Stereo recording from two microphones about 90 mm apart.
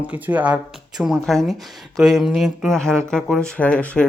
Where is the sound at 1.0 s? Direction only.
Centre (ahead or behind).